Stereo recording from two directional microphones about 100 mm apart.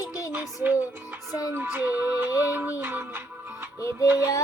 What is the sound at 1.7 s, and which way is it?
Music, 15° right (ahead or behind).